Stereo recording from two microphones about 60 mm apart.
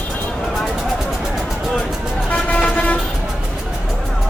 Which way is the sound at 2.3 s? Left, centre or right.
Left.